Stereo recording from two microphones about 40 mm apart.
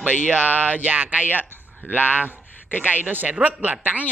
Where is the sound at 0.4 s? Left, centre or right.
Right.